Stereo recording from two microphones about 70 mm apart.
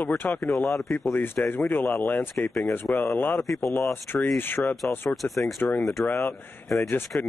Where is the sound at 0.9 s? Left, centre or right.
Left.